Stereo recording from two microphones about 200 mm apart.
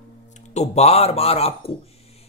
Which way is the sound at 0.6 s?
30° left (ahead or behind).